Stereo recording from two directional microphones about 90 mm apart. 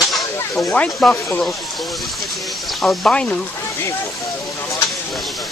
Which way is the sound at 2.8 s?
5° left (ahead or behind).